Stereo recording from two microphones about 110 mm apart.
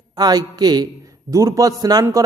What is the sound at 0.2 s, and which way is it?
A man's voice, 35° right (ahead or behind).